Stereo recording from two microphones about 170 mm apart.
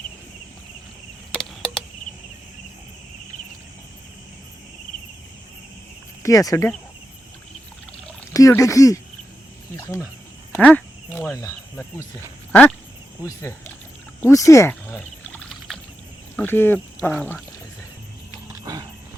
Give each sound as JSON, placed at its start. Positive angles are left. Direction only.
{"t": 1.4, "sound": "a sound", "side_deg": 0}
{"t": 6.2, "sound": "speech", "side_deg": 20}
{"t": 8.3, "sound": "speech", "side_deg": 20}
{"t": 10.5, "sound": "cricket", "side_deg": 10}
{"t": 11.3, "sound": "speech", "side_deg": 20}
{"t": 12.5, "sound": "a sound", "side_deg": 10}
{"t": 13.2, "sound": "speech", "side_deg": 15}
{"t": 14.2, "sound": "a sound", "side_deg": 15}
{"t": 16.3, "sound": "speech", "side_deg": 10}
{"t": 18.6, "sound": "horse", "side_deg": -20}